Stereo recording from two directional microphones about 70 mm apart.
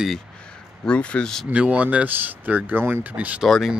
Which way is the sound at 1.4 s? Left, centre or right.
Centre.